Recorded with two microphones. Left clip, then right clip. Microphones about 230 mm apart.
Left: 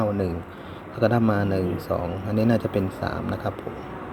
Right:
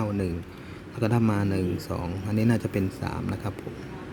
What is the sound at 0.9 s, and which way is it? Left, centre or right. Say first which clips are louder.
A man's voice: left 5 dB; right.